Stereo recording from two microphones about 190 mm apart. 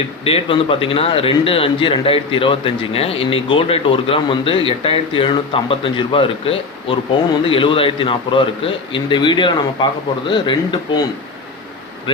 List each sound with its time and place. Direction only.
0.3 s a man's voice: 30° left (ahead or behind)
12.1 s a man's voice: 25° left (ahead or behind)